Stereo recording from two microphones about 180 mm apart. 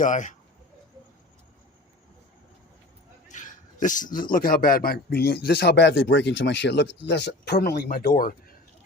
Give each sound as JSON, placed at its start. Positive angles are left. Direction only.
{"t": 0.0, "sound": "speech", "side_deg": 45}
{"t": 3.2, "sound": "a man's voice", "side_deg": 45}